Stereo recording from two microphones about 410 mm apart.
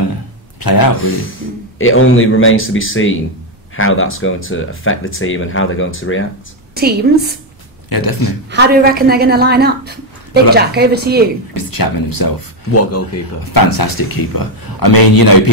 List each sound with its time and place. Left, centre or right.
0.6 s speech: left
1.8 s speech: left
6.7 s a woman's voice: right
7.9 s speech: left
8.5 s a woman's voice: right
11.5 s speech: left
13.5 s speech: left